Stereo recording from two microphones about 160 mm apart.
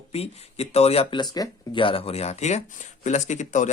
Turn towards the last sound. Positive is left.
turn(degrees=50)  # may be behind; listen again after turning